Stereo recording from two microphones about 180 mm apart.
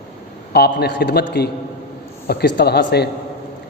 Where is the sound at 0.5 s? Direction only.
60° left (ahead or behind).